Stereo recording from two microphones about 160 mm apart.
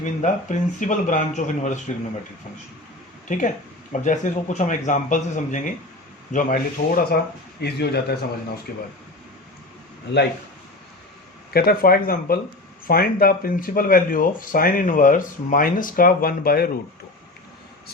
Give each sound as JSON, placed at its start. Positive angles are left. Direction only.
{"t": 0.0, "sound": "speech", "side_deg": 50}
{"t": 3.2, "sound": "speech", "side_deg": 55}
{"t": 6.3, "sound": "speech", "side_deg": 65}
{"t": 7.6, "sound": "a man's voice", "side_deg": 90}
{"t": 8.7, "sound": "speech", "side_deg": 70}
{"t": 11.5, "sound": "speech", "side_deg": 70}